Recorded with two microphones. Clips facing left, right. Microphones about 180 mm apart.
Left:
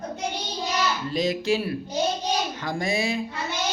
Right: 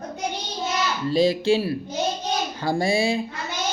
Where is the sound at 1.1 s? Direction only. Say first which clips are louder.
Right 6 dB; 30° right (ahead or behind).